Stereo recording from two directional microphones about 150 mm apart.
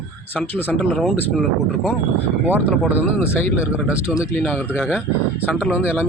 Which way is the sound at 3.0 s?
15° left (ahead or behind).